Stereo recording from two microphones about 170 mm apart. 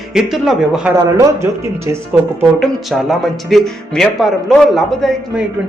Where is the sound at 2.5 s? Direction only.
Centre (ahead or behind).